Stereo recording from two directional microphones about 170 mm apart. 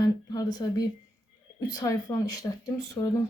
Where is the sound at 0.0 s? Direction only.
25° left (ahead or behind).